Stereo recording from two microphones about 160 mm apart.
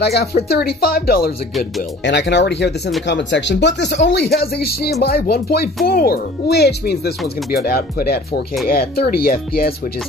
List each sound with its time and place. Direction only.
0.0 s speech: 85° left
7.6 s speech: 75° left (ahead or behind)